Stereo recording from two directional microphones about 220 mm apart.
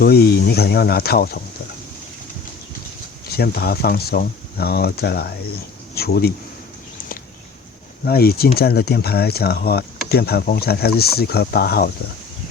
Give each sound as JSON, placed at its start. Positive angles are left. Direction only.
{"t": 0.0, "sound": "speech", "side_deg": 45}
{"t": 3.3, "sound": "speech", "side_deg": 45}
{"t": 8.0, "sound": "speech", "side_deg": 45}